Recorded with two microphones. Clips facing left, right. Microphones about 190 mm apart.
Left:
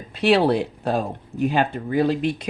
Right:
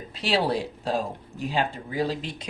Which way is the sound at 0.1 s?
60° left (ahead or behind).